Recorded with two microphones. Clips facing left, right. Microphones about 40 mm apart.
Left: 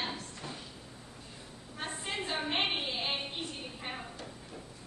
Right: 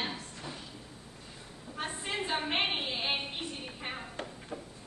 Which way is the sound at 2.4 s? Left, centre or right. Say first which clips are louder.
Right 1 dB; centre.